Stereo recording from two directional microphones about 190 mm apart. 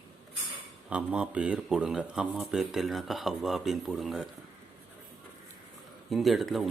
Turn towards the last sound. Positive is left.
turn(degrees=0)  # may be behind; listen again after turning